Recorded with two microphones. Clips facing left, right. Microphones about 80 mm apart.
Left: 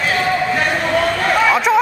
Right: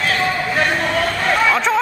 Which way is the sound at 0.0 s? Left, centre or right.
Centre.